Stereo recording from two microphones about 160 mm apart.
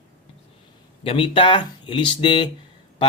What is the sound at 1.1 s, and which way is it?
Speech, 35° left (ahead or behind).